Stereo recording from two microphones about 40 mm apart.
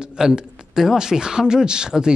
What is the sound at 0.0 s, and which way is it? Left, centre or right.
Speech, centre.